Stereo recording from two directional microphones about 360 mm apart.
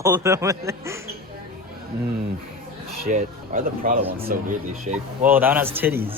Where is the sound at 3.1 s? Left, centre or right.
Right.